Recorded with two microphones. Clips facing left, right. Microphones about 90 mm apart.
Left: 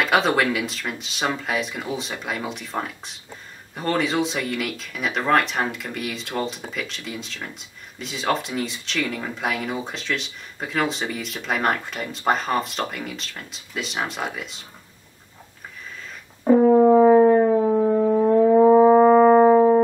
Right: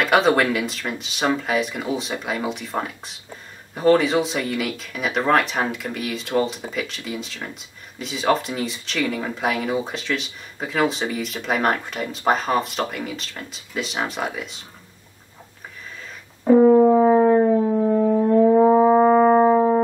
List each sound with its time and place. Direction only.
0.0 s speech: centre (ahead or behind)
16.7 s brass instrument: 10° left (ahead or behind)
17.3 s siren: 5° left (ahead or behind)
17.8 s brass instrument: 15° left (ahead or behind)
18.7 s brass instrument: centre (ahead or behind)